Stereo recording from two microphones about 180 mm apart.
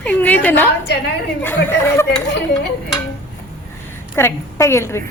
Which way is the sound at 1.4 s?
15° left (ahead or behind).